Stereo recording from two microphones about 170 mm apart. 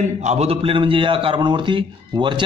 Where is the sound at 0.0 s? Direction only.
40° right (ahead or behind).